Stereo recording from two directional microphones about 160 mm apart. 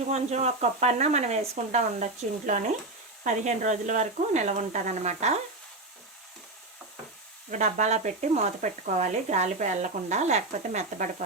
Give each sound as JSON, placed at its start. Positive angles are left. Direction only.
{"t": 0.1, "sound": "speech", "side_deg": -45}
{"t": 3.2, "sound": "speech", "side_deg": -50}
{"t": 7.5, "sound": "speech", "side_deg": -50}